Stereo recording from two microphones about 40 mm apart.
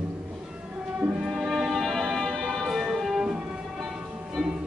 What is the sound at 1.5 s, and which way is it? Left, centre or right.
Music, centre.